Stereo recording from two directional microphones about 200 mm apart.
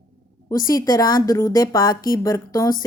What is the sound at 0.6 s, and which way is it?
A woman's voice, 20° left (ahead or behind).